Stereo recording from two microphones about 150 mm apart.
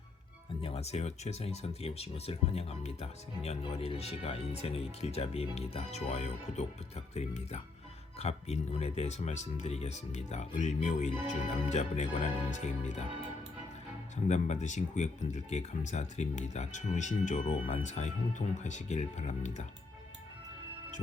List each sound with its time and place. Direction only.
0.6 s speech: 45° left (ahead or behind)
14.3 s speech: 50° left (ahead or behind)